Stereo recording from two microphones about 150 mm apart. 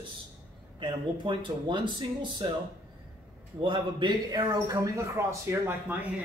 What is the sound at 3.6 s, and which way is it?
A man's voice, 35° right (ahead or behind).